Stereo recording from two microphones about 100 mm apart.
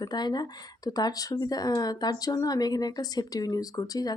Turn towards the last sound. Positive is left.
turn(degrees=40)  # may be behind; listen again after turning